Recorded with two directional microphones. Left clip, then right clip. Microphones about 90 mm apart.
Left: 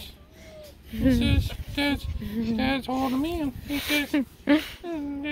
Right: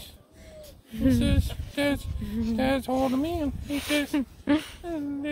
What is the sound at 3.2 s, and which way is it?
Speech, 90° right.